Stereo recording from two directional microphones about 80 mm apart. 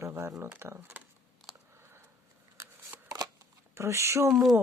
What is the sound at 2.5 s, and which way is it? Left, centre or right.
Shuffling cards, right.